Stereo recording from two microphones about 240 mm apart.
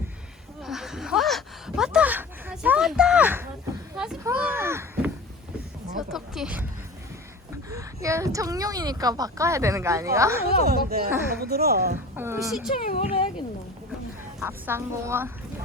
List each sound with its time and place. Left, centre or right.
0.6 s a sound: centre
7.7 s speech: centre
10.7 s speech: right
12.1 s speech: centre
12.9 s speech: left
14.3 s speech: centre